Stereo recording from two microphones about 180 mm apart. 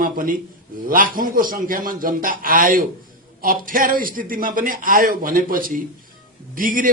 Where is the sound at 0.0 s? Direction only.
50° right (ahead or behind).